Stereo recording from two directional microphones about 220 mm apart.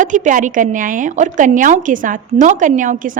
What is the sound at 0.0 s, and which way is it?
A woman's voice, 35° right (ahead or behind).